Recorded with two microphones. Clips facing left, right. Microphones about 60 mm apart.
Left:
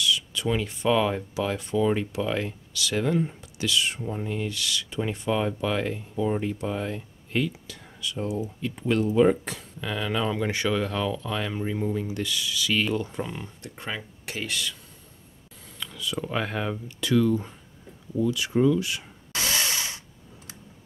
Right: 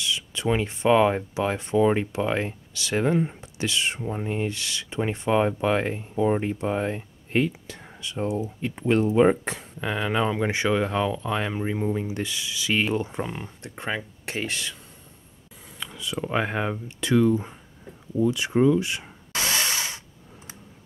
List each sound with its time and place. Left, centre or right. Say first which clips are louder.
0.0 s speech: left 1 dB; right
15.8 s speech: right 1 dB; right
18.2 s a sound: right 2 dB; right